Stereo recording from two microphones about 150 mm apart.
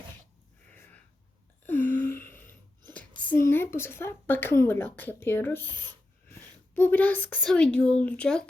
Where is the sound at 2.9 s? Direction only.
10° left (ahead or behind).